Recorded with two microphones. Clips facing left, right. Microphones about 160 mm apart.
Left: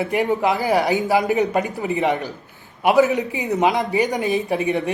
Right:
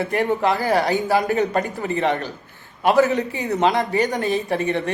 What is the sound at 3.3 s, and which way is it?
Speech, 20° left (ahead or behind).